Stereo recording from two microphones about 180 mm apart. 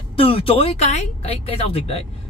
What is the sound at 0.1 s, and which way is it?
A man's voice, 30° left (ahead or behind).